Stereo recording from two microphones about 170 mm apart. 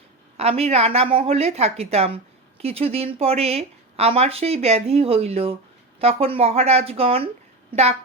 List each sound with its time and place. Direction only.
0.3 s a woman's voice: 35° right (ahead or behind)